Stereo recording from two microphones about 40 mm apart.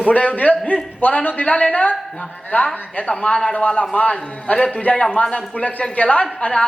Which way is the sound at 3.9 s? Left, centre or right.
Left.